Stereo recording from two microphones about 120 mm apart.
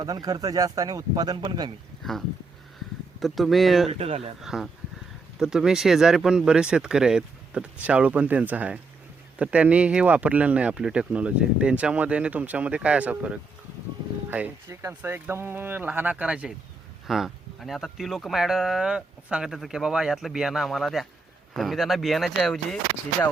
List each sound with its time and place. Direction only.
0.0 s speech: 30° right (ahead or behind)
3.2 s speech: centre (ahead or behind)
3.8 s speech: 55° right (ahead or behind)
4.4 s speech: 5° right (ahead or behind)